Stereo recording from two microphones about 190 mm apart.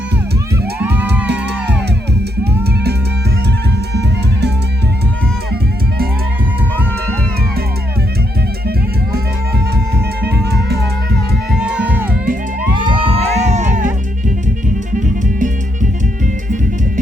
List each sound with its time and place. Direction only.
0.8 s music: 10° right (ahead or behind)
3.9 s music: 60° right (ahead or behind)
10.2 s music: 60° right (ahead or behind)
11.5 s music: 5° right (ahead or behind)
12.7 s music: 25° right (ahead or behind)
14.9 s music: 40° right (ahead or behind)